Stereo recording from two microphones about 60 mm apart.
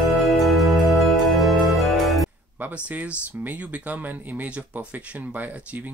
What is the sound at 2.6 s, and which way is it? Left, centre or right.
Speech, right.